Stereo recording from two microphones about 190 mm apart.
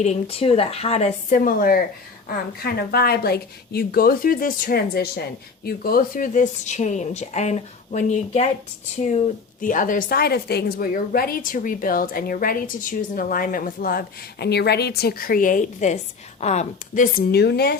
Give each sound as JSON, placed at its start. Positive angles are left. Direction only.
{"t": 0.0, "sound": "speech", "side_deg": 35}
{"t": 1.4, "sound": "a woman's voice", "side_deg": 50}